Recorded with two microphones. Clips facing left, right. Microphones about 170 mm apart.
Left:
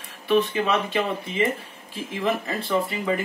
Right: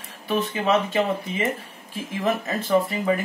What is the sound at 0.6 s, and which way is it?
Speech, 30° right (ahead or behind).